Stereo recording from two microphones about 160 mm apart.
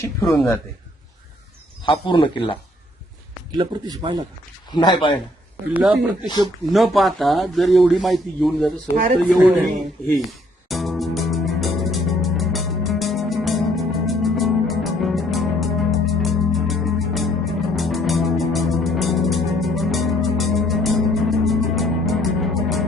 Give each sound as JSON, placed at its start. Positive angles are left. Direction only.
{"t": 1.9, "sound": "speech", "side_deg": 30}
{"t": 3.5, "sound": "speech", "side_deg": -25}
{"t": 4.7, "sound": "a man's voice", "side_deg": 30}
{"t": 5.7, "sound": "speech", "side_deg": 0}
{"t": 6.2, "sound": "a man's voice", "side_deg": 30}
{"t": 6.7, "sound": "speech", "side_deg": 0}
{"t": 10.2, "sound": "music", "side_deg": 0}